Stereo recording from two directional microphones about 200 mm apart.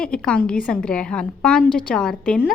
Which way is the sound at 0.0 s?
5° left (ahead or behind).